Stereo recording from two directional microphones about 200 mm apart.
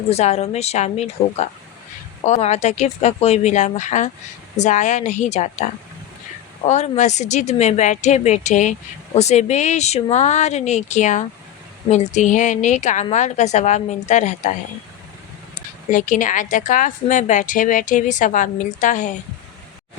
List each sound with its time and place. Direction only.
0.1 s a woman's voice: 30° left (ahead or behind)
6.7 s a woman's voice: 35° left (ahead or behind)
15.9 s a woman's voice: 40° left (ahead or behind)